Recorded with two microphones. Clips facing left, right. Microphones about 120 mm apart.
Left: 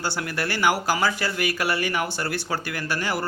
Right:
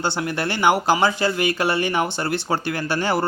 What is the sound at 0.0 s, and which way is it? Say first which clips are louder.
Speech: right 4 dB; 25° right (ahead or behind).